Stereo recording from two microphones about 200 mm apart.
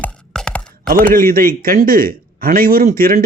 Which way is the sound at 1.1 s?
45° right (ahead or behind).